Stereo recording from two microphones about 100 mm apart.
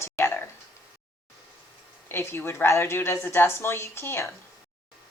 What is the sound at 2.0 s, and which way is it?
A woman's voice, 25° left (ahead or behind).